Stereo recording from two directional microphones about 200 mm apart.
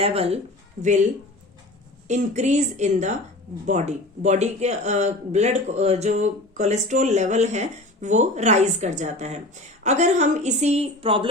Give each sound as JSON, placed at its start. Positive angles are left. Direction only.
{"t": 0.0, "sound": "speech", "side_deg": -30}
{"t": 2.0, "sound": "speech", "side_deg": -35}